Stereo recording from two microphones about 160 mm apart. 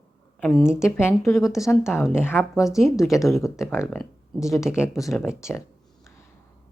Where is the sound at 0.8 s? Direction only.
15° left (ahead or behind).